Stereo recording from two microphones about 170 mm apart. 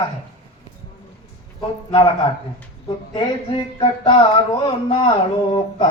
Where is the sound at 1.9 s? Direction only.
25° left (ahead or behind).